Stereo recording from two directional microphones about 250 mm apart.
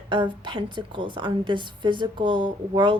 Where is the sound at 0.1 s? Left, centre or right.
Centre.